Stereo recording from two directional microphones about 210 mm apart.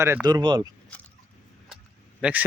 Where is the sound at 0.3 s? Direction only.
20° right (ahead or behind).